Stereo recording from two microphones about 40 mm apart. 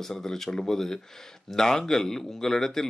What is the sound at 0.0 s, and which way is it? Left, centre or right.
Speech, centre.